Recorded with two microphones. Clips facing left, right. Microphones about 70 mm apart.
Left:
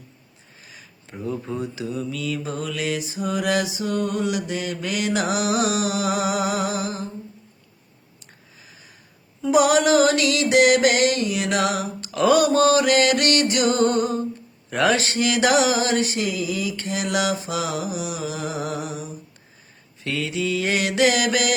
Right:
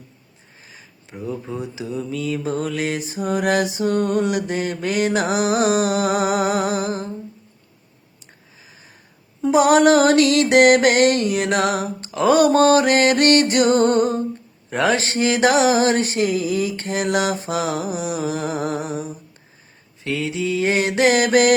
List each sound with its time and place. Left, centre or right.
1.1 s speech: centre
1.6 s speech: centre
2.0 s mantra: right
9.5 s a sound: right
12.3 s mantra: right
14.7 s mantra: right
20.1 s mantra: right